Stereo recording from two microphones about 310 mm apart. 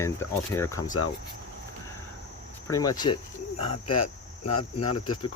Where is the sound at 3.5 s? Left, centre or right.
Left.